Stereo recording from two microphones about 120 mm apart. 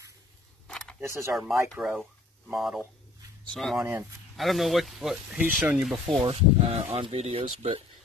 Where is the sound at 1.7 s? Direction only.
5° right (ahead or behind).